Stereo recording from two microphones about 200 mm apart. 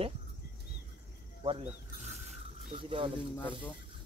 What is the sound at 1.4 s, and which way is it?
Speech, 25° right (ahead or behind).